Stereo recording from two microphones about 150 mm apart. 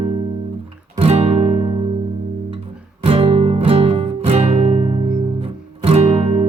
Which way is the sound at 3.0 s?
40° right (ahead or behind).